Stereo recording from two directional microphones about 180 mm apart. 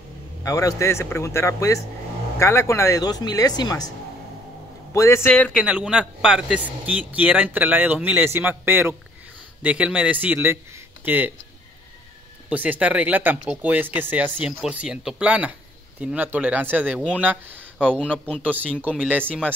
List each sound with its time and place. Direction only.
0.4 s speech: 20° left (ahead or behind)
4.9 s speech: 15° left (ahead or behind)
5.6 s speech: 5° right (ahead or behind)
12.4 s speech: 10° right (ahead or behind)
18.1 s speech: 10° left (ahead or behind)
18.8 s speech: 10° right (ahead or behind)